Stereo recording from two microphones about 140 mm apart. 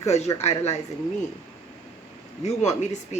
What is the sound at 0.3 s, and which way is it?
Speech, 50° left (ahead or behind).